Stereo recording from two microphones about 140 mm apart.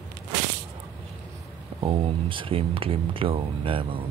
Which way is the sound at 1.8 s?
40° right (ahead or behind).